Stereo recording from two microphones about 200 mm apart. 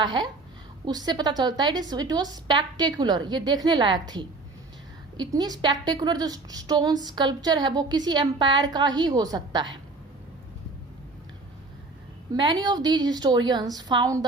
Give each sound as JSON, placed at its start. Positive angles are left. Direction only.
{"t": 0.0, "sound": "a woman's voice", "side_deg": -20}
{"t": 12.3, "sound": "a woman's voice", "side_deg": -20}